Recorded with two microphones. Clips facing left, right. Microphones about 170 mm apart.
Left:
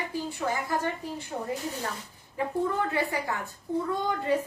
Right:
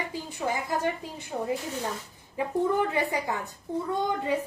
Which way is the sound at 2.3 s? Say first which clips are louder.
Right 2 dB; 15° right (ahead or behind).